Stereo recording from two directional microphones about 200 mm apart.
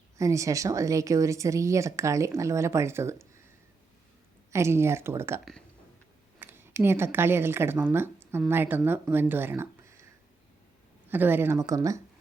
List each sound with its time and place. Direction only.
0.2 s speech: 15° right (ahead or behind)
4.5 s speech: 15° right (ahead or behind)
6.4 s speech: 10° right (ahead or behind)
11.1 s speech: 10° right (ahead or behind)